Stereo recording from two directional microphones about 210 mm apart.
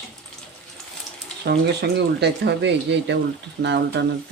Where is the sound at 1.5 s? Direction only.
50° right (ahead or behind).